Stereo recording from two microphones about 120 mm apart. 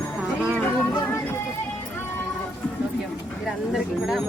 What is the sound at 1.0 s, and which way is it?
Music, 20° left (ahead or behind).